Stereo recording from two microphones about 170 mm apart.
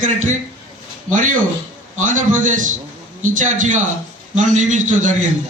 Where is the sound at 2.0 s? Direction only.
50° right (ahead or behind).